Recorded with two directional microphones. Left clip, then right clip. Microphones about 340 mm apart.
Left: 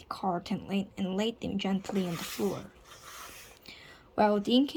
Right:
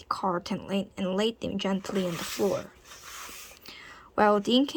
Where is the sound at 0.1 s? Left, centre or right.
Centre.